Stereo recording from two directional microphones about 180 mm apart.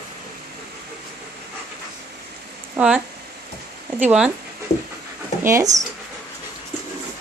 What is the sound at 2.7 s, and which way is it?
Speech, 5° right (ahead or behind).